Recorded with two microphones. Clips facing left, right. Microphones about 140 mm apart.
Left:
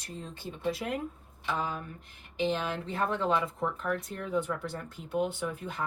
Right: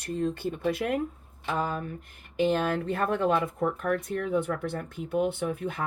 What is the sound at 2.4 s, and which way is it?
Speech, 50° right (ahead or behind).